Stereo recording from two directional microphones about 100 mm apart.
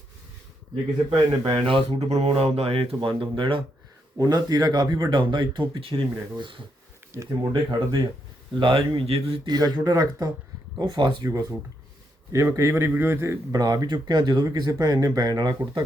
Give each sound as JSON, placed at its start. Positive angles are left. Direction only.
{"t": 1.5, "sound": "speech", "side_deg": -65}
{"t": 3.0, "sound": "speech", "side_deg": -55}
{"t": 4.2, "sound": "speech", "side_deg": -40}
{"t": 7.1, "sound": "speech", "side_deg": -30}
{"t": 7.5, "sound": "speech", "side_deg": -50}
{"t": 9.5, "sound": "speech", "side_deg": -45}
{"t": 11.3, "sound": "a man's voice", "side_deg": -30}
{"t": 13.5, "sound": "speech", "side_deg": -40}